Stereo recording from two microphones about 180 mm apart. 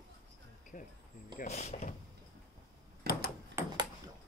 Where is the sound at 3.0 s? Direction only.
60° right (ahead or behind).